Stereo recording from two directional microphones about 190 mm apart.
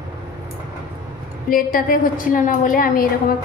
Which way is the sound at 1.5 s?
45° left (ahead or behind).